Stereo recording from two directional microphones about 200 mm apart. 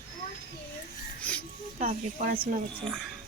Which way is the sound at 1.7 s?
40° right (ahead or behind).